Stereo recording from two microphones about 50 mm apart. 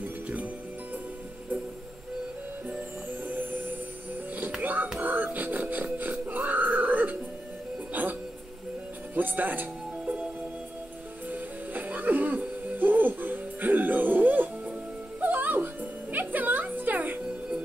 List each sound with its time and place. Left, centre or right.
0.0 s music: right
3.3 s music: right
11.2 s music: right